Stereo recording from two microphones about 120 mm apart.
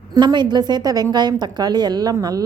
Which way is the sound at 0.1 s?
35° right (ahead or behind).